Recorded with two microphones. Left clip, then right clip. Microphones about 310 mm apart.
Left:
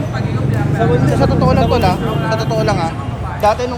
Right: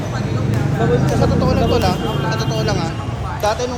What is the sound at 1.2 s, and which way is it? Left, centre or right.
Vehicle, left.